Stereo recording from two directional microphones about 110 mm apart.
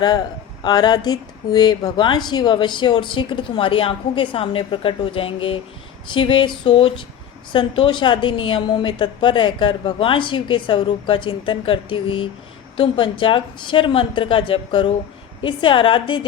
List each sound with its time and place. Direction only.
0.6 s speech: 40° left (ahead or behind)